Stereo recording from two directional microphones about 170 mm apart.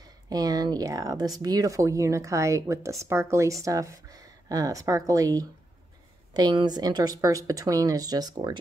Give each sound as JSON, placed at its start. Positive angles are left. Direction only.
{"t": 0.0, "sound": "speech", "side_deg": -20}